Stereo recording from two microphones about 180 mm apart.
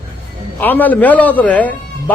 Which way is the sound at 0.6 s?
10° left (ahead or behind).